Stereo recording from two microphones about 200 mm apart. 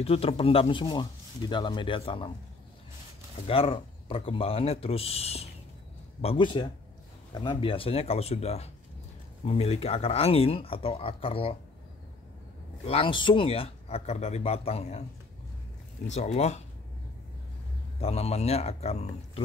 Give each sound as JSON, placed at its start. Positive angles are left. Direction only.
{"t": 0.0, "sound": "speech", "side_deg": 30}
{"t": 3.4, "sound": "speech", "side_deg": 25}
{"t": 12.8, "sound": "speech", "side_deg": 25}
{"t": 16.1, "sound": "speech", "side_deg": 35}
{"t": 18.0, "sound": "speech", "side_deg": 30}